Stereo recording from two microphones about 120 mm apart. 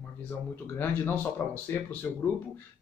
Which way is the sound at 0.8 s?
15° left (ahead or behind).